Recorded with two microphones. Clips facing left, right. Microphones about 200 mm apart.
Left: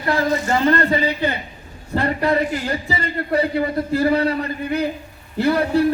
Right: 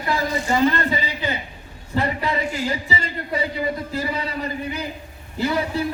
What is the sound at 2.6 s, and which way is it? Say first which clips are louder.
A man's voice: left 2 dB; 60° left (ahead or behind).